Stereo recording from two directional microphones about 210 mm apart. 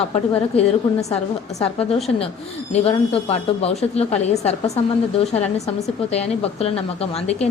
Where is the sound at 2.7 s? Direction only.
30° left (ahead or behind).